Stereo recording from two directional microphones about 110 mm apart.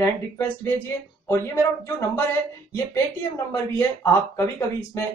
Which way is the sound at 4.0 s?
20° left (ahead or behind).